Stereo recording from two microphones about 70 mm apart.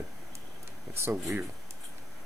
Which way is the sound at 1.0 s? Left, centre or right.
Right.